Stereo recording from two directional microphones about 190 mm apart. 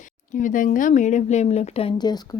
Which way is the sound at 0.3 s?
40° left (ahead or behind).